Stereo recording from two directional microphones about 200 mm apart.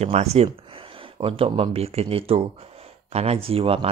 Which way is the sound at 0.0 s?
30° right (ahead or behind).